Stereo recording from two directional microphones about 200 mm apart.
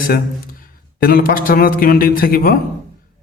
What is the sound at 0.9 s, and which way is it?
A man's voice, 45° left (ahead or behind).